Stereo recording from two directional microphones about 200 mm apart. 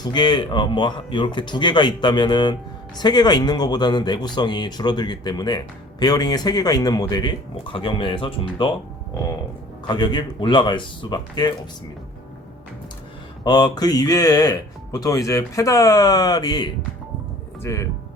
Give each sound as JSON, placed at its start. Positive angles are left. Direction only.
{"t": 0.0, "sound": "speech", "side_deg": 20}
{"t": 9.8, "sound": "speech", "side_deg": 20}
{"t": 13.4, "sound": "speech", "side_deg": 20}